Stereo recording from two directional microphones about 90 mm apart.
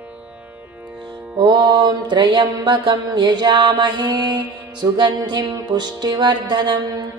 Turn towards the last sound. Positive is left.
turn(degrees=-50)  # may be behind; listen again after turning